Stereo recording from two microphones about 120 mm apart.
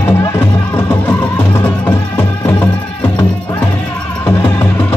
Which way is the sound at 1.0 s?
15° left (ahead or behind).